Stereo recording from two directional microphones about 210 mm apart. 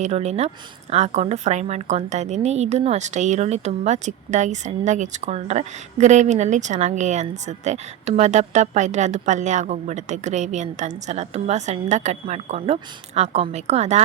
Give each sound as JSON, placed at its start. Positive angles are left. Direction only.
{"t": 0.0, "sound": "speech", "side_deg": -30}